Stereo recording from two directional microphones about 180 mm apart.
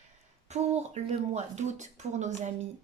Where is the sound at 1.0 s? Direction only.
40° right (ahead or behind).